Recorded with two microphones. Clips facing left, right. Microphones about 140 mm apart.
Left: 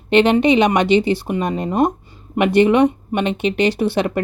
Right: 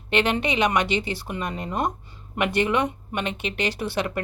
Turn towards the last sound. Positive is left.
turn(degrees=25)  # may be behind; listen again after turning